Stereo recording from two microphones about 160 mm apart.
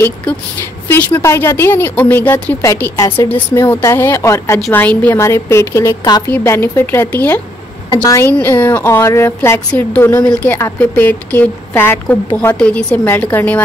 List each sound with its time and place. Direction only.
0.8 s a woman's voice: 10° left (ahead or behind)
7.9 s a woman's voice: 20° left (ahead or behind)
8.3 s a woman's voice: 10° left (ahead or behind)